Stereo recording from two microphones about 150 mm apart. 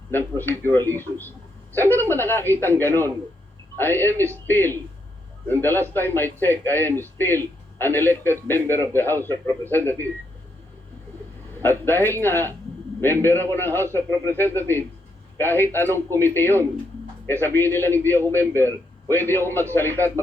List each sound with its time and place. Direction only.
0.1 s a man's voice: 15° left (ahead or behind)
11.6 s a man's voice: 15° left (ahead or behind)